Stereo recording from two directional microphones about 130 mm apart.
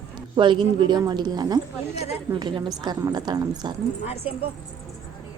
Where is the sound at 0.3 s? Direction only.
40° right (ahead or behind).